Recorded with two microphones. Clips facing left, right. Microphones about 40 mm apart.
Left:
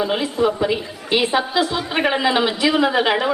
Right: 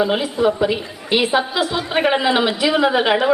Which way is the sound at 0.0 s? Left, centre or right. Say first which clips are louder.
Right 2 dB; centre.